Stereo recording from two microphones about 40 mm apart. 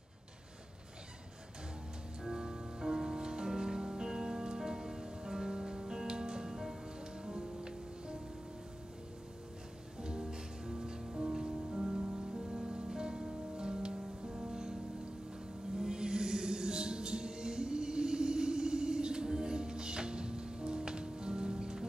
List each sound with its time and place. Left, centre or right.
2.2 s music: centre
10.0 s music: right